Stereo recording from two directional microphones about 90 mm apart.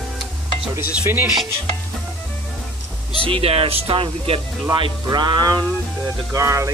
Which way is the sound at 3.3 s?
85° right.